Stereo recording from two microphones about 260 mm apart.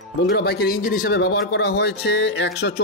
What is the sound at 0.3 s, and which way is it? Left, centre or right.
Speech, left.